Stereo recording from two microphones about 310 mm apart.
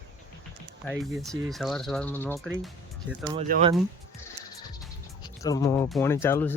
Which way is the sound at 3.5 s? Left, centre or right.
Right.